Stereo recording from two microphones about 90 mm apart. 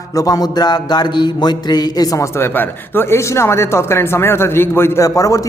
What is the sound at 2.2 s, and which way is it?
A man's voice, 30° left (ahead or behind).